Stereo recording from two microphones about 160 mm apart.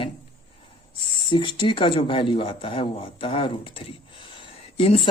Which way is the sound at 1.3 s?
30° left (ahead or behind).